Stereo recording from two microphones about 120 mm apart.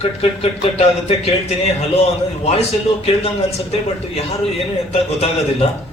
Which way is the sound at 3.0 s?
60° left (ahead or behind).